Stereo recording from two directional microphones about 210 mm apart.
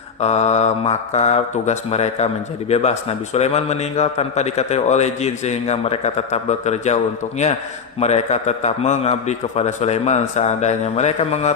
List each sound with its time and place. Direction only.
0.2 s a man's voice: 30° left (ahead or behind)